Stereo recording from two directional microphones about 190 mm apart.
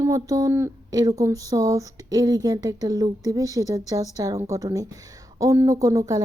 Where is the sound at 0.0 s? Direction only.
15° right (ahead or behind).